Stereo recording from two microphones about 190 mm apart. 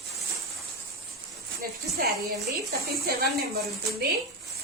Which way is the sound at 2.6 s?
55° right (ahead or behind).